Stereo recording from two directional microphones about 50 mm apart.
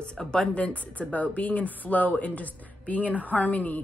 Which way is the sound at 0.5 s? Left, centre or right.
Left.